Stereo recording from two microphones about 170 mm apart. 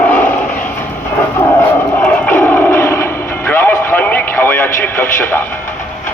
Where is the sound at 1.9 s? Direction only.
10° left (ahead or behind).